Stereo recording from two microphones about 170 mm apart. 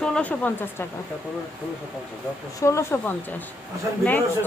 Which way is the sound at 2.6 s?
15° left (ahead or behind).